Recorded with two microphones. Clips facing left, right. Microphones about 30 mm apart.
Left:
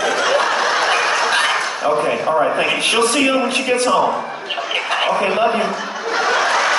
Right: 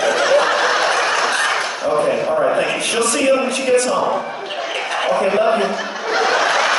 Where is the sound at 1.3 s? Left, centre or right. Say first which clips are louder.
Left 1 dB; left.